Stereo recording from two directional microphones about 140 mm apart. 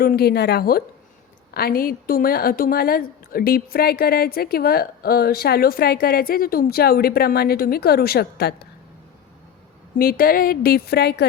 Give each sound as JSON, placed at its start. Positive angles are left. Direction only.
{"t": 0.0, "sound": "a woman's voice", "side_deg": 90}
{"t": 10.0, "sound": "a woman's voice", "side_deg": 90}